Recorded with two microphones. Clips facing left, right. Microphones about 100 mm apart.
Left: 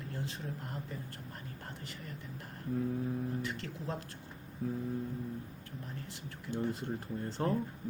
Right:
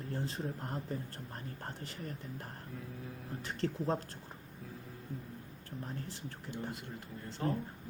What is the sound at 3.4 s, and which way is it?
Speech, 35° right (ahead or behind).